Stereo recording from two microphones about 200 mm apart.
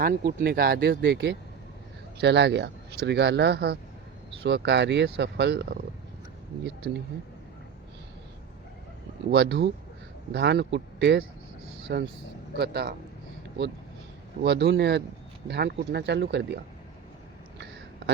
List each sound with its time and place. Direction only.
0.0 s speech: 50° right (ahead or behind)
6.8 s speech: 55° right (ahead or behind)
9.3 s speech: 55° right (ahead or behind)
14.4 s speech: 55° right (ahead or behind)